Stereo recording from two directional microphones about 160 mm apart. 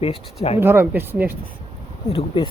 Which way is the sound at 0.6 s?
15° right (ahead or behind).